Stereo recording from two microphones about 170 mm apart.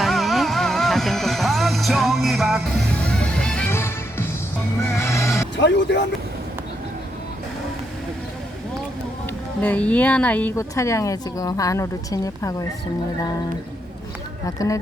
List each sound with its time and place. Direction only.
0.0 s music: centre (ahead or behind); by 5.5 s 15° left (ahead or behind)
5.5 s speech: 90° left
9.6 s speech: 10° left (ahead or behind)
14.4 s speech: 20° left (ahead or behind)